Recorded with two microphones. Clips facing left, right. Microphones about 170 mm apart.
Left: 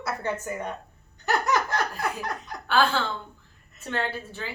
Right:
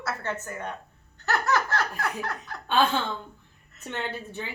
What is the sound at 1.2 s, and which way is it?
Laughter, 15° left (ahead or behind).